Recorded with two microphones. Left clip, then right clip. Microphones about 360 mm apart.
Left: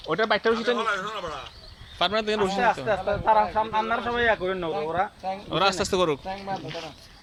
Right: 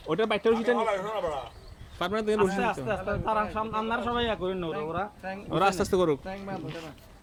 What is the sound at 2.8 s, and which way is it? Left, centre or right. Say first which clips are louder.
Speech: left 7 dB; centre.